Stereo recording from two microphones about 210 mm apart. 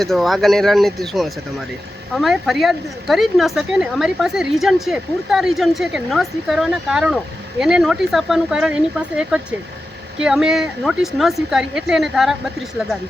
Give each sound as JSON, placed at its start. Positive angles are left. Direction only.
{"t": 0.0, "sound": "speech", "side_deg": 0}